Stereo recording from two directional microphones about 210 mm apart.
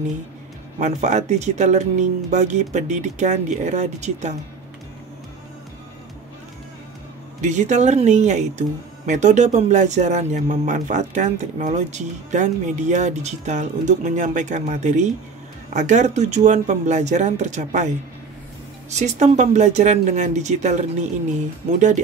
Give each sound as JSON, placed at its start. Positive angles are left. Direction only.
{"t": 0.7, "sound": "speech", "side_deg": -35}
{"t": 7.4, "sound": "speech", "side_deg": -35}